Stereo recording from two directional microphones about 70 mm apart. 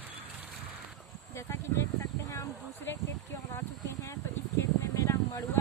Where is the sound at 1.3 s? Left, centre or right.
Left.